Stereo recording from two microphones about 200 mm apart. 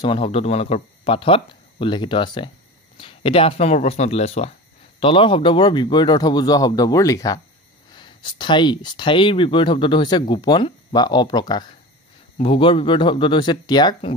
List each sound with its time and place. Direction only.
0.0 s speech: 25° left (ahead or behind)